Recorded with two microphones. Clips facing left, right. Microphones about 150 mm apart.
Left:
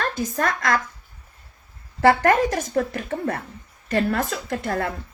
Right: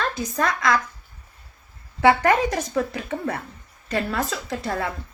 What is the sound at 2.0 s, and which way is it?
A woman's voice, 45° left (ahead or behind).